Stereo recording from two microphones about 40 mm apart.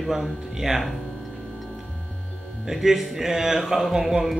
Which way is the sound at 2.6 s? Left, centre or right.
Centre.